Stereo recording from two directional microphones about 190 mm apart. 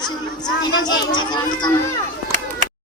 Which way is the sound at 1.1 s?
25° left (ahead or behind).